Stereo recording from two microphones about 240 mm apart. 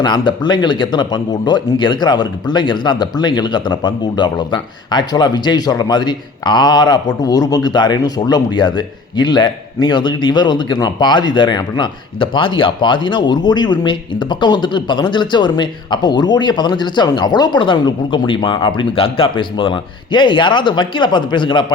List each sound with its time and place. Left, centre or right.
0.0 s speech: centre